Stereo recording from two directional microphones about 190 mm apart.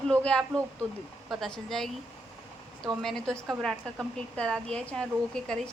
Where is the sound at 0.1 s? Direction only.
5° left (ahead or behind).